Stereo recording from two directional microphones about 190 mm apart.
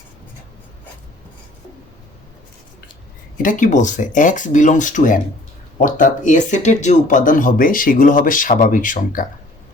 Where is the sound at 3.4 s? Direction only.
45° left (ahead or behind).